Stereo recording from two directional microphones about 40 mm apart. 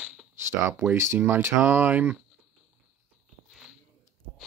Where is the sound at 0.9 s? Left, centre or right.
Right.